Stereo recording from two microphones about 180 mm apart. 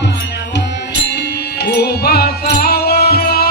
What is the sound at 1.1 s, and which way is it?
Music, 65° left (ahead or behind).